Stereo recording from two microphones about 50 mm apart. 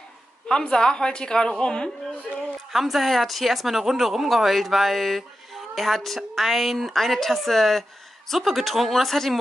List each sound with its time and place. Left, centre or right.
0.5 s a woman's voice: centre
2.7 s speech: centre